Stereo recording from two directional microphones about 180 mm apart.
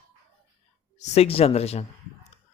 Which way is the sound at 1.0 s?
35° left (ahead or behind).